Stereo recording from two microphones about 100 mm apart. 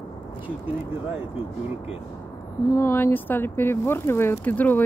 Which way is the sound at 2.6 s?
25° left (ahead or behind).